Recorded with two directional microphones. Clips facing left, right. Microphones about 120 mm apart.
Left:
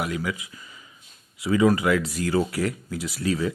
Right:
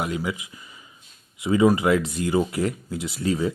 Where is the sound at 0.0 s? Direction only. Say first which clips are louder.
Right 1 dB; 25° right (ahead or behind).